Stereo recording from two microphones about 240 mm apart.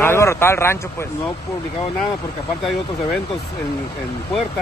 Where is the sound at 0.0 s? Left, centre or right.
Centre.